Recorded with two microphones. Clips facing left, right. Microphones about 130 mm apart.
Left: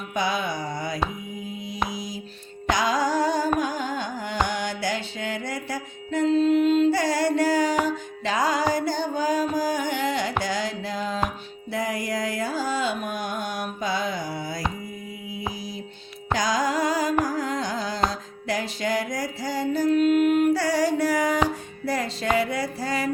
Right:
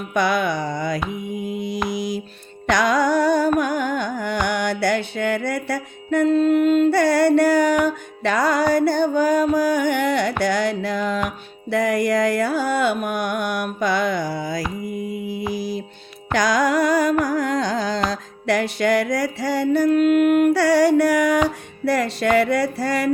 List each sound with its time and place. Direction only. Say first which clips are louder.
0.1 s a sound: right 6 dB; 70° right (ahead or behind); by 0.9 s 90° right
1.3 s mantra: right 8 dB; 75° right (ahead or behind)
2.6 s music: right 5 dB; 70° right (ahead or behind)
3.6 s carnatic music: right 5 dB; 65° right (ahead or behind)
4.4 s music: right 6 dB; 70° right (ahead or behind); by 14.6 s 90° right
15.4 s mantra: right 6 dB; 90° right
16.3 s carnatic music: right 5 dB; 75° right (ahead or behind)
18.1 s music: right 7 dB; 75° right (ahead or behind)